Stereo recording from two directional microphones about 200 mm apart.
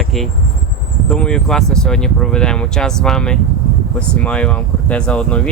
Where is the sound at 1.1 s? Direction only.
5° left (ahead or behind).